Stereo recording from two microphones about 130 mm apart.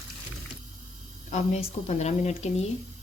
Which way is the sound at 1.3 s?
60° left (ahead or behind).